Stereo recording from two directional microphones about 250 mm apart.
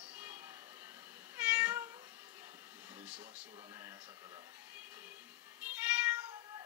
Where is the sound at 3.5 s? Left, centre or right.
Centre.